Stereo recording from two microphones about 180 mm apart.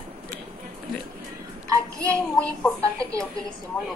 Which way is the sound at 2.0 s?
5° left (ahead or behind).